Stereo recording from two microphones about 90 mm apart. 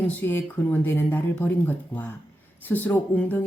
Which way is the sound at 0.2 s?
20° left (ahead or behind).